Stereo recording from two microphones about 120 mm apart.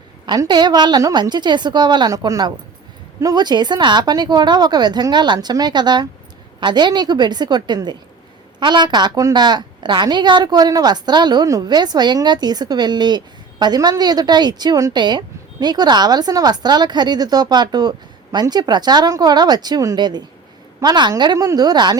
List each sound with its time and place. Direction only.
0.3 s a woman's voice: 40° right (ahead or behind)